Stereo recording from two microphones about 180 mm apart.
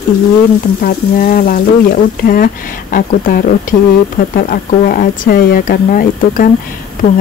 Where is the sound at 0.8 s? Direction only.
55° left (ahead or behind).